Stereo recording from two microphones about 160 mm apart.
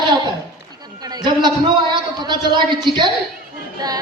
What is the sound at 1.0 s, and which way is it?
A man's voice, 25° right (ahead or behind).